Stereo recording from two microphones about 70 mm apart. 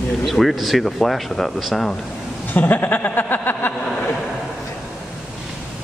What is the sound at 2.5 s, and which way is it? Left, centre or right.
Speech, left.